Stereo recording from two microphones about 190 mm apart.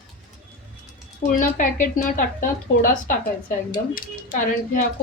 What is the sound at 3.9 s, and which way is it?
Speech, 45° left (ahead or behind).